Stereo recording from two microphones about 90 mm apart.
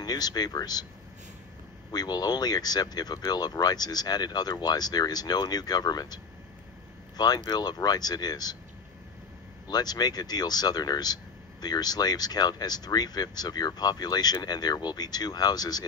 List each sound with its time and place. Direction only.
0.0 s speech: 50° left (ahead or behind)
1.9 s speech: 50° left (ahead or behind)
9.7 s speech: 50° left (ahead or behind)